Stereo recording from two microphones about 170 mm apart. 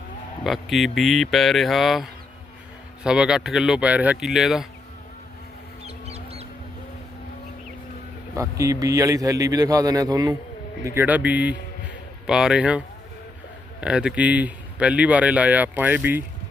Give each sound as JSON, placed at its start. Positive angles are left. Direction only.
{"t": 0.4, "sound": "speech", "side_deg": 0}
{"t": 5.8, "sound": "a sound", "side_deg": -35}
{"t": 8.4, "sound": "a man's voice", "side_deg": -20}
{"t": 10.8, "sound": "speech", "side_deg": -10}
{"t": 13.8, "sound": "speech", "side_deg": -5}